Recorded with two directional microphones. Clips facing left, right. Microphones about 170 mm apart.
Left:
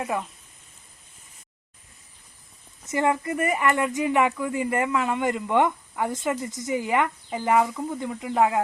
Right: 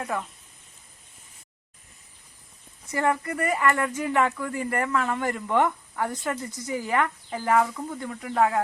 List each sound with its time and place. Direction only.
0.0 s speech: 15° left (ahead or behind)
2.8 s speech: 20° left (ahead or behind)